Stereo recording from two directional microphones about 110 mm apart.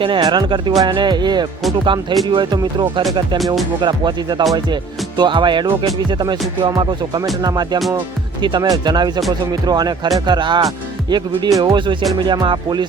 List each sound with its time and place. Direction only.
0.2 s speech: 45° right (ahead or behind)
3.3 s music: centre (ahead or behind)
3.8 s speech: 45° right (ahead or behind)